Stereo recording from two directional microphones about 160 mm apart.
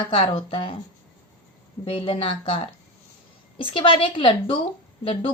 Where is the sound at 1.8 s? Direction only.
35° left (ahead or behind).